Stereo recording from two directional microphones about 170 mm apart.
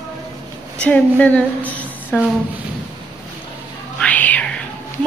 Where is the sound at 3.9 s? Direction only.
10° left (ahead or behind).